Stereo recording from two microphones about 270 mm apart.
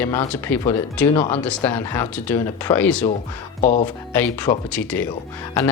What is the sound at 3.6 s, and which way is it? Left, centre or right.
Speech, left.